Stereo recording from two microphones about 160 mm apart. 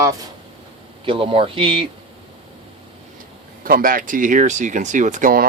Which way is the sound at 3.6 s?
65° right (ahead or behind).